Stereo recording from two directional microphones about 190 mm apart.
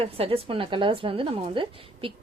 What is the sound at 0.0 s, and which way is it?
A woman's voice, 30° right (ahead or behind).